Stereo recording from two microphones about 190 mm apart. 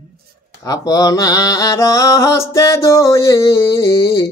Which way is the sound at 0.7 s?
20° left (ahead or behind).